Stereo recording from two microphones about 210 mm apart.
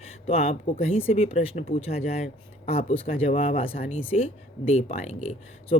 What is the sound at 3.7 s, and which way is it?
Speech, 40° left (ahead or behind).